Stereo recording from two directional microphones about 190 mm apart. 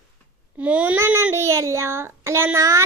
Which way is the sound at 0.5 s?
10° right (ahead or behind).